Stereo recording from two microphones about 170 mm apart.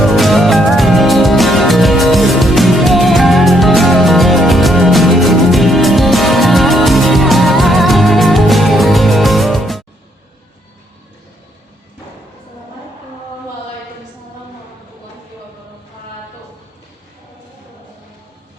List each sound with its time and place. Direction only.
0.0 s music: centre (ahead or behind)